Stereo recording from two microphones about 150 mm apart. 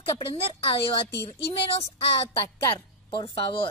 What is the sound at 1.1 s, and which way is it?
Speech, 25° right (ahead or behind).